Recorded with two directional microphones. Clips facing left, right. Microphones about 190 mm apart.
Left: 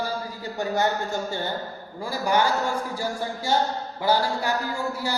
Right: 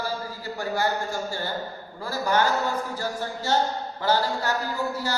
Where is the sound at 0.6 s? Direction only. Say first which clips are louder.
Left 2 dB; 20° left (ahead or behind).